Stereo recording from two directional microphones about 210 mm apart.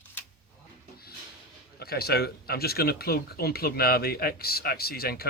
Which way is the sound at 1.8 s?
50° left (ahead or behind).